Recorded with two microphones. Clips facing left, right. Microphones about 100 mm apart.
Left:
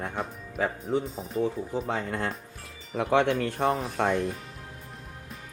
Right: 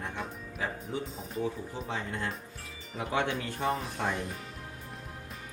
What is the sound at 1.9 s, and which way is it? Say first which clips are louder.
Speech: left 5 dB; 55° left (ahead or behind).